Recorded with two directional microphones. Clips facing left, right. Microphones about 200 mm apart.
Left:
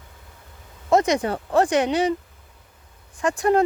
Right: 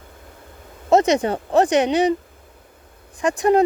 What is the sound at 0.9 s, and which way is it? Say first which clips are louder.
Speech: right 3 dB; 25° right (ahead or behind).